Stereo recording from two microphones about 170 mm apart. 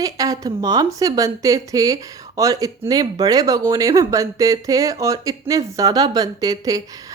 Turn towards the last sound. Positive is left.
turn(degrees=-20)  # may be behind; listen again after turning